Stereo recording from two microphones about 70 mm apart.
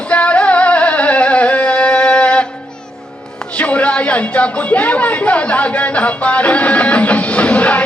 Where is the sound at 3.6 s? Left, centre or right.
Left.